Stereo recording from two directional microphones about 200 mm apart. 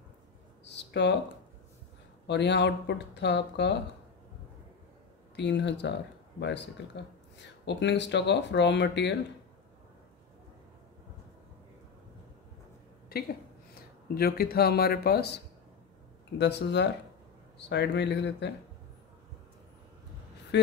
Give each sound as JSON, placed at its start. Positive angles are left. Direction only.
{"t": 0.7, "sound": "a sound", "side_deg": 60}
{"t": 2.2, "sound": "speech", "side_deg": 60}
{"t": 5.3, "sound": "speech", "side_deg": 60}
{"t": 7.3, "sound": "speech", "side_deg": 60}
{"t": 13.7, "sound": "speech", "side_deg": 50}
{"t": 20.5, "sound": "a sound", "side_deg": 60}